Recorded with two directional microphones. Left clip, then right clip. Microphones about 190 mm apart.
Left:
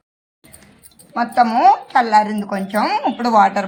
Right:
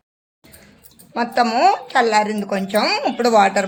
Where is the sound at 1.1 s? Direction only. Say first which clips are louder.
Left 3 dB; 20° right (ahead or behind).